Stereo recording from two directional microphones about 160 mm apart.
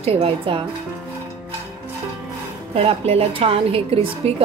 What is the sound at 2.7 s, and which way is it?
A woman's voice, 35° right (ahead or behind).